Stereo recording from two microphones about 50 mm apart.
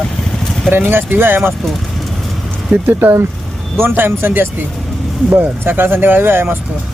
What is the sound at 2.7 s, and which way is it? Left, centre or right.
Speech, right.